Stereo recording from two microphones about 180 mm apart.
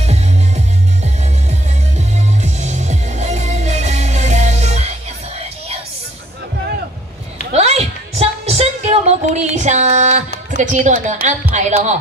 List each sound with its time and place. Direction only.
2.4 s music: 40° right (ahead or behind)
7.5 s a sound: 35° right (ahead or behind)
10.5 s speech: 40° right (ahead or behind)